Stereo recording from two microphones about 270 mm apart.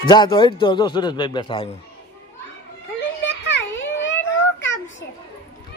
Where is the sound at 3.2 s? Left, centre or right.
Left.